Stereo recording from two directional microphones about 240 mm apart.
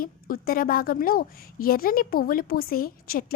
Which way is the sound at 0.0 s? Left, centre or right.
Left.